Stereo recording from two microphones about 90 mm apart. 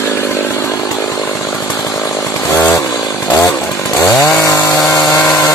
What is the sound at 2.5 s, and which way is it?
Chainsaw, 30° left (ahead or behind).